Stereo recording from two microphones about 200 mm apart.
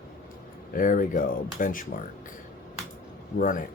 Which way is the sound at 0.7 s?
45° left (ahead or behind).